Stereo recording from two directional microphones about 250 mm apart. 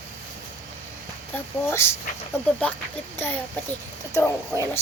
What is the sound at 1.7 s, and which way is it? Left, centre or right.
A woman's voice, centre.